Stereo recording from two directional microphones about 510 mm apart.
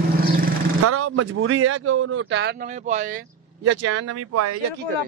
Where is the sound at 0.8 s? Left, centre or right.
Right.